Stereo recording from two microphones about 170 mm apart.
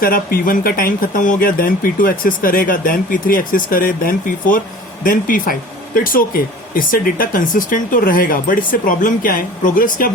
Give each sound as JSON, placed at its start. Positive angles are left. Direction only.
{"t": 0.0, "sound": "speech", "side_deg": 60}